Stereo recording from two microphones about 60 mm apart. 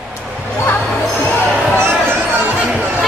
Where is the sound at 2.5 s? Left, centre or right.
Centre.